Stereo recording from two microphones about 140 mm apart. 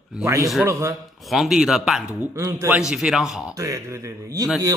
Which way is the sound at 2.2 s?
20° right (ahead or behind).